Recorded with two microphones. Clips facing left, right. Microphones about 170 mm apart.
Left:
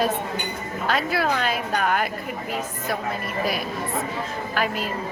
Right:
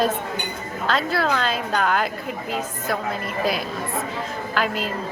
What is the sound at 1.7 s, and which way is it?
Speech, 90° right.